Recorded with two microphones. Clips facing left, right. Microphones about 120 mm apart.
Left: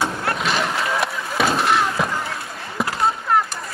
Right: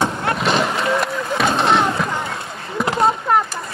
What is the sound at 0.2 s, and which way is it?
Vehicle, centre (ahead or behind).